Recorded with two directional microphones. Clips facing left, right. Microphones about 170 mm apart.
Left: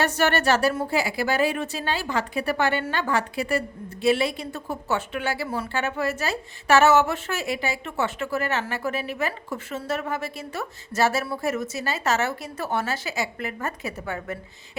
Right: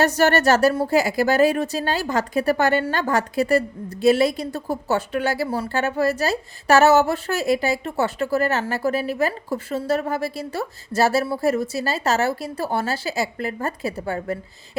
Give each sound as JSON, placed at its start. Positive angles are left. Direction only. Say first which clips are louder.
{"t": 0.0, "sound": "a woman's voice", "louder": "right 5 dB", "side_deg": -40}